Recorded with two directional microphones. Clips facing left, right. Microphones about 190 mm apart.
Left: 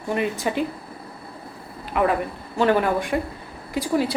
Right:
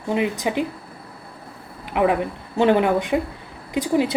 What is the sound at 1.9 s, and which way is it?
A woman's voice, 15° right (ahead or behind).